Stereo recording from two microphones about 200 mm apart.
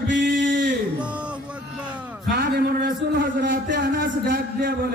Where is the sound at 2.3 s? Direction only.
50° right (ahead or behind).